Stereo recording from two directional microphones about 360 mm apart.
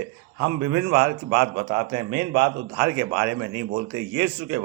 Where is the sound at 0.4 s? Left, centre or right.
Right.